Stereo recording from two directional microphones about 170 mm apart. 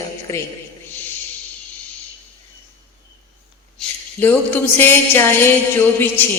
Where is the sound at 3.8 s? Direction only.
5° left (ahead or behind).